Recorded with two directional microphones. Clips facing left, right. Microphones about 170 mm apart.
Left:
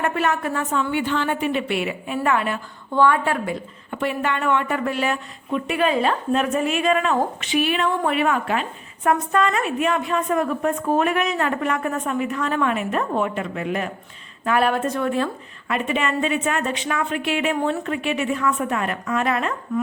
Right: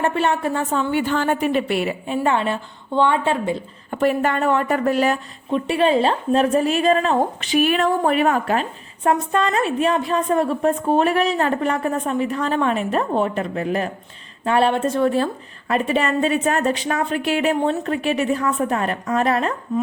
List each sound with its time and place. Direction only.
0.0 s a woman's voice: 30° right (ahead or behind)
3.9 s a woman's voice: 40° right (ahead or behind)